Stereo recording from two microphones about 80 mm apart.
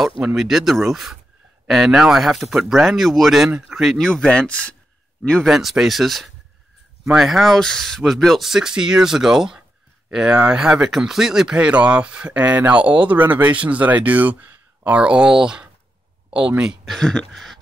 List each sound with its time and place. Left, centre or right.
0.2 s speech: centre
3.4 s speech: centre
4.0 s speech: centre
5.4 s speech: centre
16.8 s speech: centre